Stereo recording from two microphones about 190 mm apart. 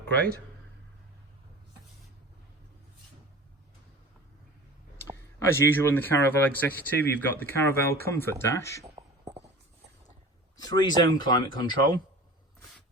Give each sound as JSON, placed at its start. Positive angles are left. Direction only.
{"t": 4.9, "sound": "speech", "side_deg": 10}
{"t": 9.0, "sound": "beatboxing", "side_deg": -15}
{"t": 10.6, "sound": "speech", "side_deg": 20}